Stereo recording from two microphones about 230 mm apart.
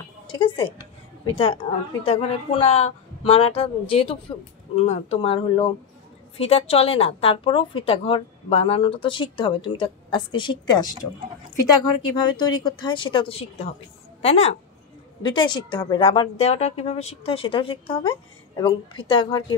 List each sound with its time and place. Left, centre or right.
0.3 s a woman's voice: left